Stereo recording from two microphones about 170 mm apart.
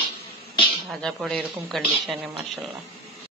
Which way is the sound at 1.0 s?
5° left (ahead or behind).